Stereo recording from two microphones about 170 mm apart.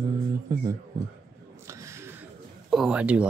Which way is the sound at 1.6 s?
15° right (ahead or behind).